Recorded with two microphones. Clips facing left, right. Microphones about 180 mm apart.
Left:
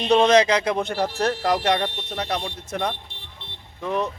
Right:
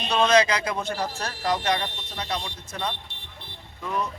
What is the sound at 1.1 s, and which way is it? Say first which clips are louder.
Speech: left 6 dB; 60° left (ahead or behind).